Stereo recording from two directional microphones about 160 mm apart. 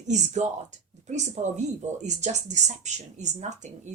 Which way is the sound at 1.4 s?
45° right (ahead or behind).